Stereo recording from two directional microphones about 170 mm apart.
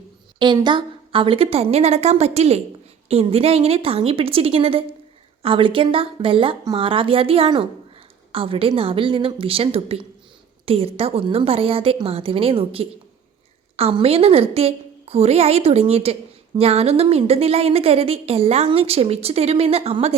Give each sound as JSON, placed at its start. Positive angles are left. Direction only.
{"t": 0.3, "sound": "a woman's voice", "side_deg": -25}